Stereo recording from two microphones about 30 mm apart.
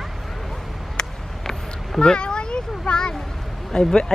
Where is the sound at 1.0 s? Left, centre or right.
Left.